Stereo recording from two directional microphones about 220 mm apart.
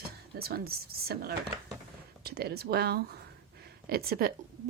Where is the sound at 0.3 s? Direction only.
45° right (ahead or behind).